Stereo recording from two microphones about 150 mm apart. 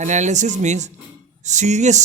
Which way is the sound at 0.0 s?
50° right (ahead or behind).